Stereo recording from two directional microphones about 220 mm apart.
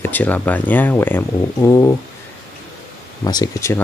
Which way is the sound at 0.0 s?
10° left (ahead or behind).